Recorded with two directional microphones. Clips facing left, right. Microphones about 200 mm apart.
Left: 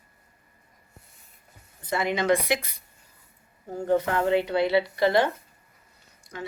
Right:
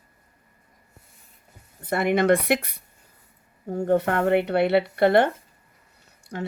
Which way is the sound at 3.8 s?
55° right (ahead or behind).